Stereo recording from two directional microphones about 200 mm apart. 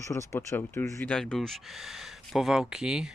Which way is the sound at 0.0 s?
15° left (ahead or behind).